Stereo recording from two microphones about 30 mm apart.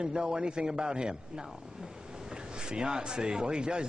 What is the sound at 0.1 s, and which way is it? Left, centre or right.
A man's voice, right.